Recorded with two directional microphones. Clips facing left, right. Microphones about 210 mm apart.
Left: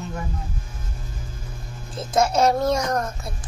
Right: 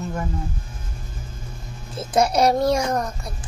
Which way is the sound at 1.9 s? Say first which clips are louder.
Right 1 dB; 15° right (ahead or behind).